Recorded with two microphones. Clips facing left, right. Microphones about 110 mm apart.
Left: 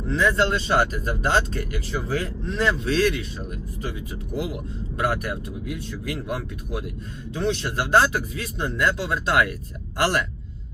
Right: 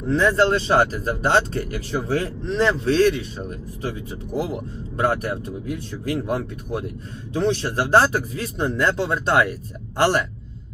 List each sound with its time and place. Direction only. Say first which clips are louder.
0.1 s speech: right 4 dB; 35° right (ahead or behind)
1.9 s speech: right 4 dB; 55° right (ahead or behind)
2.6 s speech: right 4 dB; 35° right (ahead or behind)
4.4 s speech: right 3 dB; 35° right (ahead or behind)